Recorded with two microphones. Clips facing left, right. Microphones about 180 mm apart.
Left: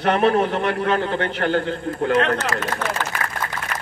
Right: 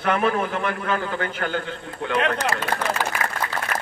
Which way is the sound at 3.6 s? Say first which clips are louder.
Right 2 dB; 25° right (ahead or behind).